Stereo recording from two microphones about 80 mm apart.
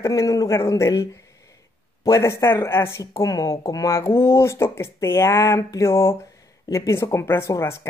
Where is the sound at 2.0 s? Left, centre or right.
Left.